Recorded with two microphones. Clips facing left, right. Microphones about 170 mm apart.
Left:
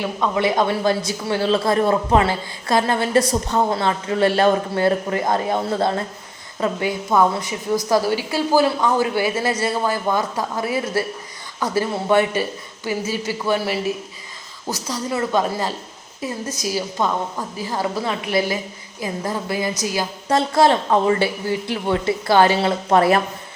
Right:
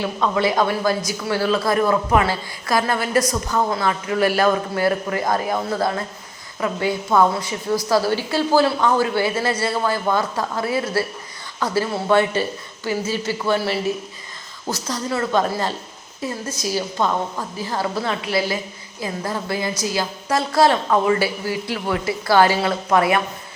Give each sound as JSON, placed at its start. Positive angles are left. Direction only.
{"t": 0.0, "sound": "speech", "side_deg": 20}